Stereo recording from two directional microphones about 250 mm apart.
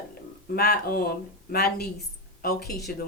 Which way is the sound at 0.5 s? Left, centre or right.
Left.